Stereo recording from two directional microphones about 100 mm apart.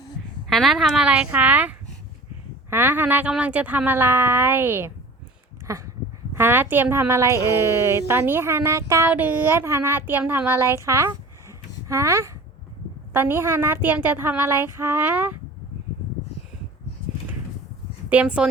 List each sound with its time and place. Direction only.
0.4 s speech: centre (ahead or behind); by 4.9 s 20° right (ahead or behind)
5.6 s speech: 30° right (ahead or behind)
18.1 s speech: 10° right (ahead or behind)